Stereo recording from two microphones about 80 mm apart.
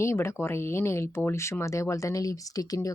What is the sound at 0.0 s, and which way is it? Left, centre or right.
Speech, left.